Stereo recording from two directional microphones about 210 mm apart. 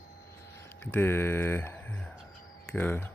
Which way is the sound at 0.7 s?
10° left (ahead or behind).